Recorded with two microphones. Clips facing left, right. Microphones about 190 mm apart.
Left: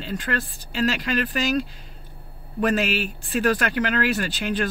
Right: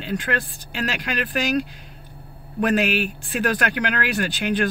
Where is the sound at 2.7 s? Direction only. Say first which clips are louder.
Right 6 dB; 60° right (ahead or behind).